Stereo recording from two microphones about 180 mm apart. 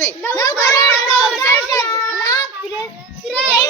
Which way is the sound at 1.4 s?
20° left (ahead or behind).